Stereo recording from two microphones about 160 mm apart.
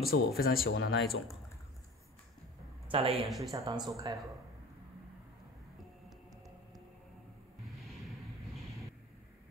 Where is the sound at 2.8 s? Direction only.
40° right (ahead or behind).